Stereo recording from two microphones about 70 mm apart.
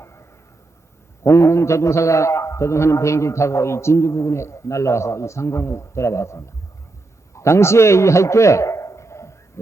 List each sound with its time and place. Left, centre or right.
0.0 s arrow: left
1.2 s a man's voice: left